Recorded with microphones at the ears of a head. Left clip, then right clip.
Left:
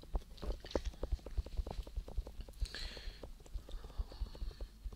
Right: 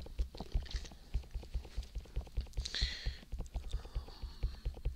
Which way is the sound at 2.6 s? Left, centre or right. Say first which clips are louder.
Right 8 dB; right.